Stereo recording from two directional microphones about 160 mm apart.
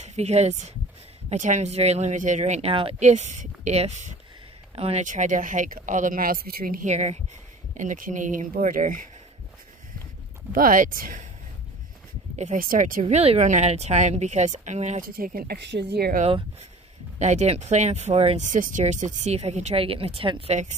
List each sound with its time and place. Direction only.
0.0 s speech: 45° right (ahead or behind); by 6.9 s 65° right (ahead or behind)
6.9 s speech: 45° right (ahead or behind)
10.5 s speech: 60° right (ahead or behind)
12.4 s speech: 55° right (ahead or behind)
13.0 s speech: 40° right (ahead or behind)
15.1 s speech: 65° right (ahead or behind); by 16.2 s 85° right
17.2 s speech: 45° right (ahead or behind)